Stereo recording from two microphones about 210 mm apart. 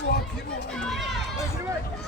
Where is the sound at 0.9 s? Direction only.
Centre (ahead or behind).